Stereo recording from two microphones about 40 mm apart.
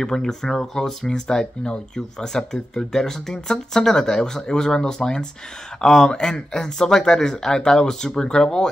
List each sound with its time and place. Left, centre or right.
0.0 s speech: centre